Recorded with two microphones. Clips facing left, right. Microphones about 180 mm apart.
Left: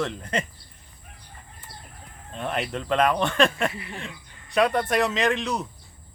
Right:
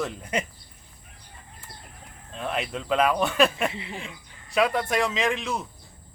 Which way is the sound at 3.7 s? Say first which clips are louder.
Right 1 dB; 25° right (ahead or behind).